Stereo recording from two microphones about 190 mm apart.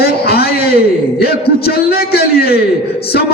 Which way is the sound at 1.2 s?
55° left (ahead or behind).